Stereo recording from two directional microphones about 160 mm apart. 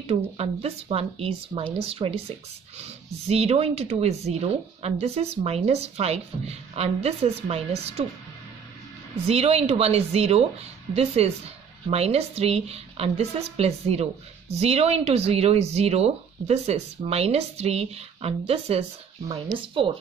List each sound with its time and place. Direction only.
0.4 s speech: 40° right (ahead or behind)
9.1 s speech: 40° right (ahead or behind)